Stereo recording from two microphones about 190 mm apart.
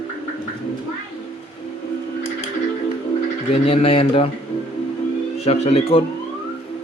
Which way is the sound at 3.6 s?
30° left (ahead or behind).